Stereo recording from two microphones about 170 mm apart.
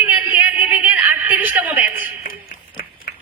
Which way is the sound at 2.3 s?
55° left (ahead or behind).